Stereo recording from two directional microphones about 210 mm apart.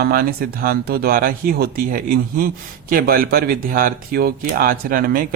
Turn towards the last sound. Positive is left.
turn(degrees=-40)  # may be behind; listen again after turning